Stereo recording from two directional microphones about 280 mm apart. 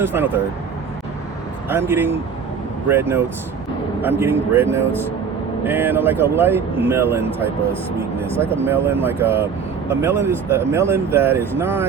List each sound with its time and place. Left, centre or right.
0.0 s speech: centre
1.7 s speech: centre
8.4 s speech: centre